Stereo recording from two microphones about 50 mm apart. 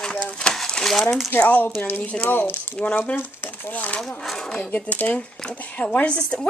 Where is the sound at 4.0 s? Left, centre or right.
Centre.